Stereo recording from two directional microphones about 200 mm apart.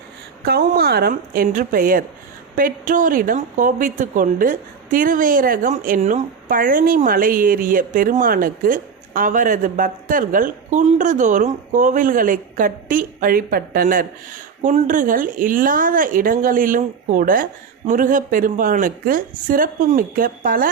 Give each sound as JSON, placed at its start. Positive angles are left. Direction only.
{"t": 0.4, "sound": "speech", "side_deg": -50}